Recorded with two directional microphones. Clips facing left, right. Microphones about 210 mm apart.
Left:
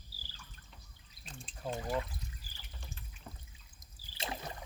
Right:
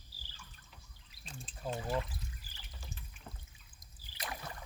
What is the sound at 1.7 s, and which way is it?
Speech, 5° left (ahead or behind).